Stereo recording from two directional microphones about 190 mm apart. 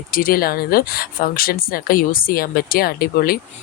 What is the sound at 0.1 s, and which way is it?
Speech, 50° left (ahead or behind).